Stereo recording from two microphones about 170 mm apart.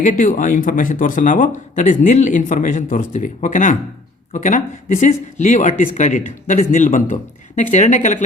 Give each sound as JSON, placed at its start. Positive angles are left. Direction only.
{"t": 0.0, "sound": "speech", "side_deg": 50}